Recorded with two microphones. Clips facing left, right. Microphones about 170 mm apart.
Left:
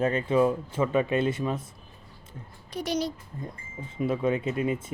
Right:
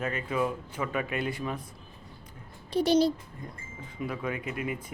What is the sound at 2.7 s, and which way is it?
Speech, 30° right (ahead or behind).